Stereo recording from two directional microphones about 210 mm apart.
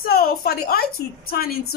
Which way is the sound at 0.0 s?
45° left (ahead or behind).